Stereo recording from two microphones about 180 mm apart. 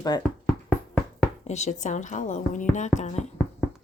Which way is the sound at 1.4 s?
40° left (ahead or behind).